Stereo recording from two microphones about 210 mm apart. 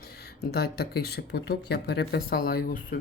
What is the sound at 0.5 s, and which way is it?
Speech, 50° left (ahead or behind).